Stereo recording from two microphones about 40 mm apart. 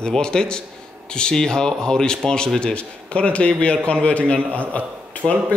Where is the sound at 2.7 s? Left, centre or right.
Left.